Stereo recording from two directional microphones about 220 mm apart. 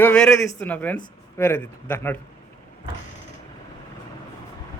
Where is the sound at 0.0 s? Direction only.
5° left (ahead or behind).